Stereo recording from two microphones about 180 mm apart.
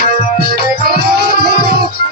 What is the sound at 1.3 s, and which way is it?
Music, 65° right (ahead or behind).